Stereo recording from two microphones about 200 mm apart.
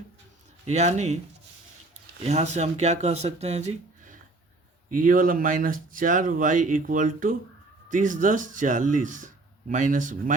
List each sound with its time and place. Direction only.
0.6 s speech: 35° right (ahead or behind)
2.2 s speech: 35° right (ahead or behind)